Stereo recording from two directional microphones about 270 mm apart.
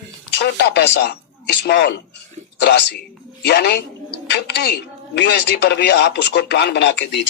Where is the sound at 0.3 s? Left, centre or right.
Left.